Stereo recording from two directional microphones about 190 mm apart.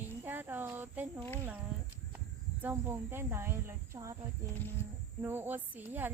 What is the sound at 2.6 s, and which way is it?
Speech, 10° right (ahead or behind).